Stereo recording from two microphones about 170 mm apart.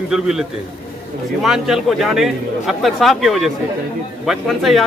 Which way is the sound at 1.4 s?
5° right (ahead or behind).